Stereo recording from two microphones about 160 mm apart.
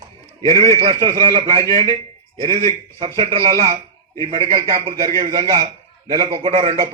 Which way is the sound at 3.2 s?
20° right (ahead or behind).